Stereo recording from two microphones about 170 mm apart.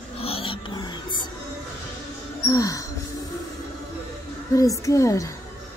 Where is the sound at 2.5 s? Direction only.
20° left (ahead or behind).